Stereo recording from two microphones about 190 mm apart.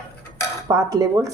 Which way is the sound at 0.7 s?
15° right (ahead or behind).